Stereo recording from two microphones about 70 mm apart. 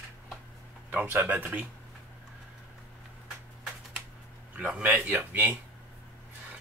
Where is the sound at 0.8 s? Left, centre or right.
Right.